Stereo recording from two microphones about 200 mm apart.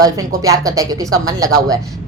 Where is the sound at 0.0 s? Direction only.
15° right (ahead or behind).